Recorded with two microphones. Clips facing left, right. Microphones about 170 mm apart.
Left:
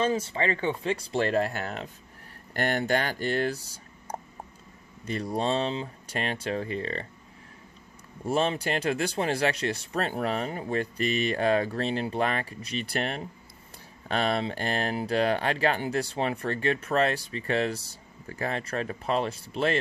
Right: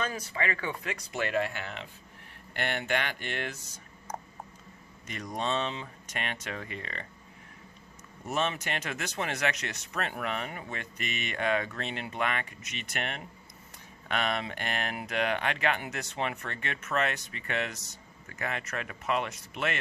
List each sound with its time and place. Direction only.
0.0 s speech: 30° left (ahead or behind)
8.3 s speech: 30° left (ahead or behind)